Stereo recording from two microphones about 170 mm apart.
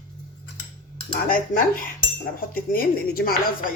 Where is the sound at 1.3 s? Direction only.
55° left (ahead or behind).